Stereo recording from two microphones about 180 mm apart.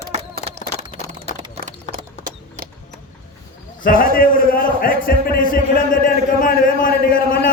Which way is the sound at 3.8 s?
50° left (ahead or behind).